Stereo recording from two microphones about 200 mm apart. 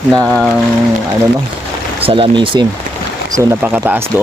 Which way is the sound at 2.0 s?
25° right (ahead or behind).